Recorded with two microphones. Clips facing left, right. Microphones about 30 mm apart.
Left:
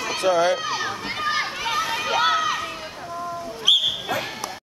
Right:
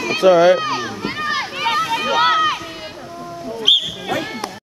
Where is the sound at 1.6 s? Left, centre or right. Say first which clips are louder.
Right 6 dB; right.